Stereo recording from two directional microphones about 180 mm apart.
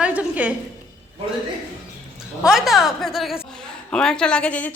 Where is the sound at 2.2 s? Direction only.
5° right (ahead or behind).